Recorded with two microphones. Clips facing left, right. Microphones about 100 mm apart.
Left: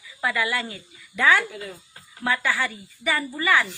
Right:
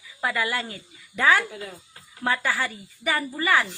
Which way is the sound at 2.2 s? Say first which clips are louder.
Left 1 dB; 35° right (ahead or behind).